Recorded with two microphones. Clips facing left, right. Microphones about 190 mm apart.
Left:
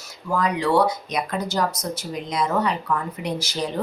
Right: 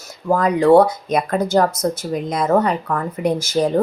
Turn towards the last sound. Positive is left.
turn(degrees=-50)  # may be behind; listen again after turning